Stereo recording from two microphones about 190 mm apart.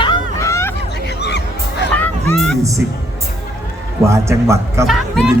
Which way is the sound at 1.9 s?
5° left (ahead or behind).